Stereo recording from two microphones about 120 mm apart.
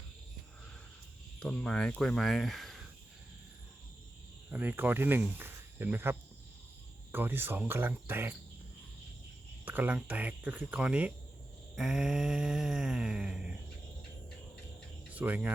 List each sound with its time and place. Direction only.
1.4 s groan: 10° left (ahead or behind)
4.4 s speech: 15° right (ahead or behind)
9.6 s speech: 15° right (ahead or behind)
11.7 s groan: 5° right (ahead or behind)
15.1 s speech: 15° right (ahead or behind)